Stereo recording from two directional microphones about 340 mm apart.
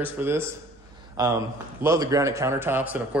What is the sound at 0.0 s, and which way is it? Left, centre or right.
Speech, centre.